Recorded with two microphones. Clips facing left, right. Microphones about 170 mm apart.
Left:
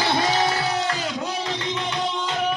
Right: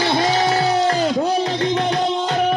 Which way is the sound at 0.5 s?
40° right (ahead or behind).